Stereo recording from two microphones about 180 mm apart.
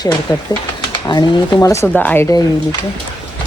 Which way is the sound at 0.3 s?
25° left (ahead or behind).